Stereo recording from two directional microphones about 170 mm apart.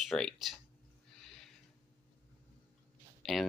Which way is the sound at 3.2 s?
Centre (ahead or behind).